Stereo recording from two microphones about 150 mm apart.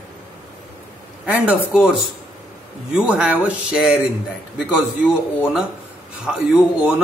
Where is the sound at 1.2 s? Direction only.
10° right (ahead or behind).